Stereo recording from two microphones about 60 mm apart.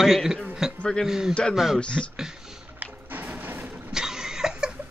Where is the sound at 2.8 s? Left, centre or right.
Right.